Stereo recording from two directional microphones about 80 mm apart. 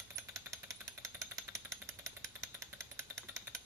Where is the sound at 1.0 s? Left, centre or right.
Right.